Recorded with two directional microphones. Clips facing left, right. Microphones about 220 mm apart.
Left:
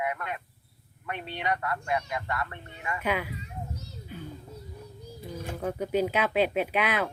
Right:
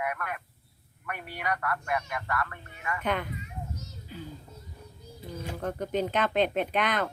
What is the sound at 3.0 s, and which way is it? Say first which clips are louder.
Speech: left 1 dB; 5° left (ahead or behind).